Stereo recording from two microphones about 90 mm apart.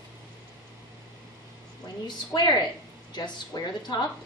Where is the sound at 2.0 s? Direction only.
50° left (ahead or behind).